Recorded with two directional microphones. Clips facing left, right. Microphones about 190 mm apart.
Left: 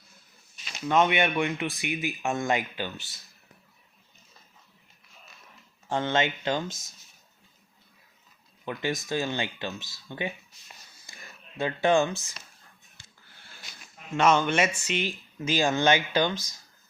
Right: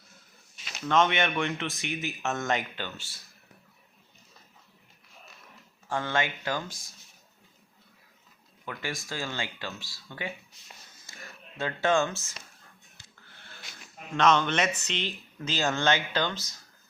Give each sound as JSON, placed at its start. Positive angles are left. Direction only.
{"t": 0.9, "sound": "speech", "side_deg": 10}
{"t": 5.9, "sound": "speech", "side_deg": 20}
{"t": 8.6, "sound": "speech", "side_deg": 20}
{"t": 11.0, "sound": "a sound", "side_deg": 15}
{"t": 14.1, "sound": "speech", "side_deg": 10}